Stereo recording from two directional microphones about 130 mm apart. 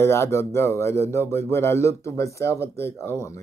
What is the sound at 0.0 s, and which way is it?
Speech, 20° left (ahead or behind).